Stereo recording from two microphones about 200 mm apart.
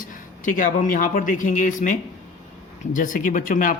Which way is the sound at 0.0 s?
40° left (ahead or behind).